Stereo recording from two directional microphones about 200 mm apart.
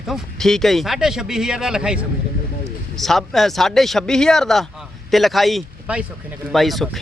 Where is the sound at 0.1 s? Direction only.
Centre (ahead or behind).